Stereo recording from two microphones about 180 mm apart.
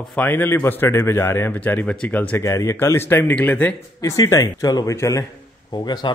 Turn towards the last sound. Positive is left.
turn(degrees=25)  # may be behind; listen again after turning